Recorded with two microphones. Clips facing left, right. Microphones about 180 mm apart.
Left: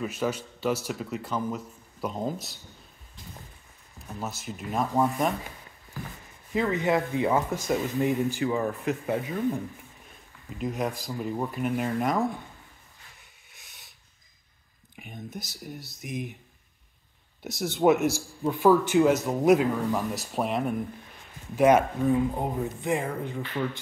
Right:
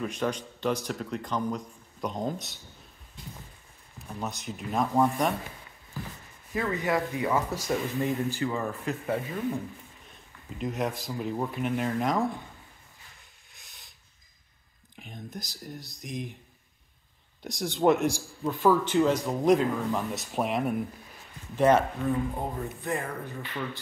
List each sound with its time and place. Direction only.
0.0 s speech: 5° left (ahead or behind)
4.1 s speech: centre (ahead or behind)
6.5 s speech: 20° left (ahead or behind)
10.6 s speech: centre (ahead or behind)
13.5 s a sound: centre (ahead or behind)
15.0 s speech: 5° left (ahead or behind)
17.4 s speech: 5° left (ahead or behind)
21.5 s speech: 10° left (ahead or behind)